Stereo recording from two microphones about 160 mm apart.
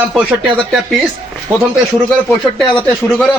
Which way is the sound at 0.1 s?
5° right (ahead or behind).